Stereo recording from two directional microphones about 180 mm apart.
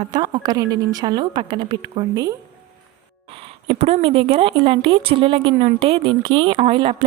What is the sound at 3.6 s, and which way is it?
Speech, 35° right (ahead or behind).